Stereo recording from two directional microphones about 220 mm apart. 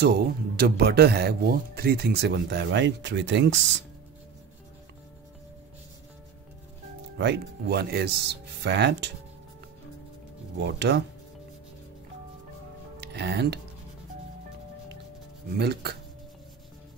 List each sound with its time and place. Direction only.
0.0 s speech: 45° right (ahead or behind)
7.2 s speech: 50° right (ahead or behind)
10.6 s speech: 50° right (ahead or behind)
13.0 s speech: 50° right (ahead or behind)
15.5 s speech: 50° right (ahead or behind)